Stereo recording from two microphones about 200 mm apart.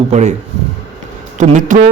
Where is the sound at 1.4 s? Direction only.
40° right (ahead or behind).